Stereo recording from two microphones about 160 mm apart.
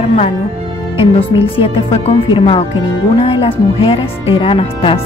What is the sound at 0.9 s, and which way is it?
Speech, 35° left (ahead or behind).